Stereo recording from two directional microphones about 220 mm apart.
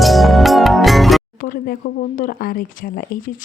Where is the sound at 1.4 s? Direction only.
40° left (ahead or behind).